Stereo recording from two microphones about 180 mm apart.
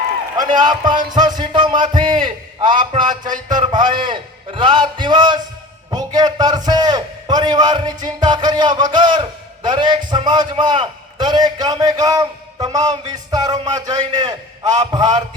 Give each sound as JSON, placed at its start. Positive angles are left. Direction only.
{"t": 0.5, "sound": "a man's voice", "side_deg": -25}